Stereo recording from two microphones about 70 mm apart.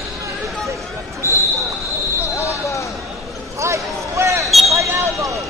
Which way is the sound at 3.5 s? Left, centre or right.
Right.